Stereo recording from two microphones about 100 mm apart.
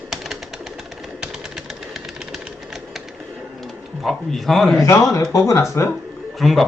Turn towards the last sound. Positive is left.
turn(degrees=0)  # may be behind; listen again after turning